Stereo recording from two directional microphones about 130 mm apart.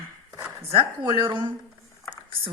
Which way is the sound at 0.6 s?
45° right (ahead or behind).